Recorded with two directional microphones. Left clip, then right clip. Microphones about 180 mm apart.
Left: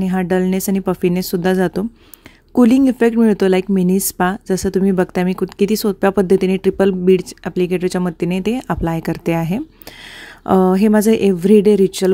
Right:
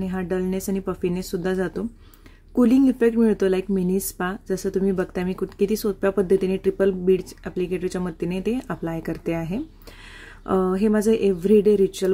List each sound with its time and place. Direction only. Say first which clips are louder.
0.0 s speech: left 8 dB; 45° left (ahead or behind)